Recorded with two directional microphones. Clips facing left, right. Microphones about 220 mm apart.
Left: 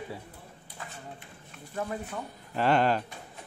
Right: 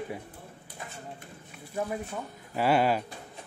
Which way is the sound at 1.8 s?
10° right (ahead or behind).